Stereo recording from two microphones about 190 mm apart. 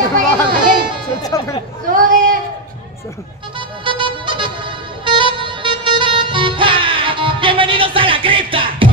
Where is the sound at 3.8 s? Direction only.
25° right (ahead or behind).